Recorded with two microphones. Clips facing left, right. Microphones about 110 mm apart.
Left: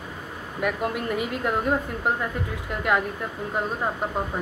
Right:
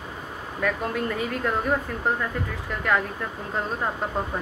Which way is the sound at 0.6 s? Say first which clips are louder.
Even; 15° left (ahead or behind).